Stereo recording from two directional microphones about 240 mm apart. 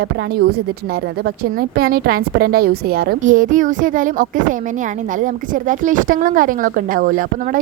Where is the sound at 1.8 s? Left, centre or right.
Right.